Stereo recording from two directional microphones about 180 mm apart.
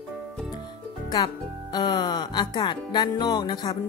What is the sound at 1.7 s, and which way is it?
Speech, 25° left (ahead or behind).